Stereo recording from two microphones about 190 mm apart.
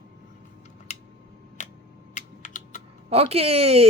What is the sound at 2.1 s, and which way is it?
Typing, 40° left (ahead or behind).